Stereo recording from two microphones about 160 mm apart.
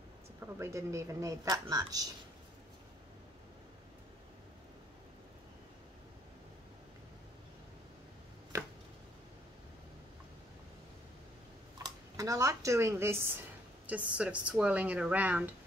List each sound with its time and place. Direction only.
0.4 s speech: 15° right (ahead or behind)
11.8 s speech: 20° right (ahead or behind)